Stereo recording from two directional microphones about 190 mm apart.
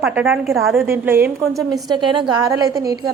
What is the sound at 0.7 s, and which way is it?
A woman's voice, 15° right (ahead or behind).